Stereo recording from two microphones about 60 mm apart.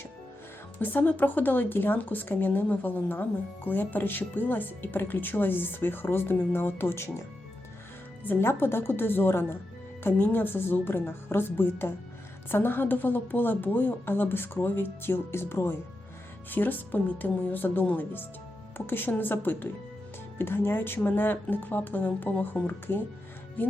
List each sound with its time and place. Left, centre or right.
0.8 s speech: left
8.3 s speech: left
16.5 s speech: left